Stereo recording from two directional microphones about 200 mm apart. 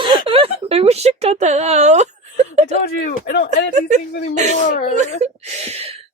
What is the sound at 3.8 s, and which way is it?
Whimper, 35° right (ahead or behind).